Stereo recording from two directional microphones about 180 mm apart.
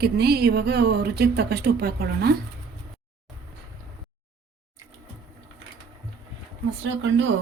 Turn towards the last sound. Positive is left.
turn(degrees=-90)